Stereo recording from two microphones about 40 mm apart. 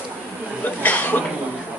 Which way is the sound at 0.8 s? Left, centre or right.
Left.